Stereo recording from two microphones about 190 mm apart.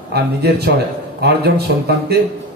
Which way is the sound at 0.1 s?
60° right (ahead or behind).